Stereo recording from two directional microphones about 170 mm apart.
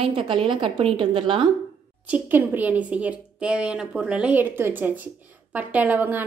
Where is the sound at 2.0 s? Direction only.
10° right (ahead or behind).